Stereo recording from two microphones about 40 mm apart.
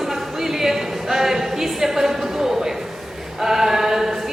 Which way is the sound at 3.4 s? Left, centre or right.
Centre.